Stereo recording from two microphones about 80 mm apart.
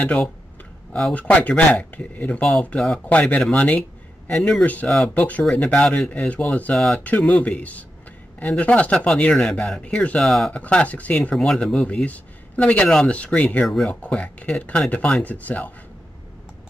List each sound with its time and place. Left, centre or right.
1.1 s speech: centre
5.1 s speech: centre
10.2 s speech: centre
10.5 s speech: centre
11.3 s speech: centre
13.7 s speech: centre
14.0 s speech: centre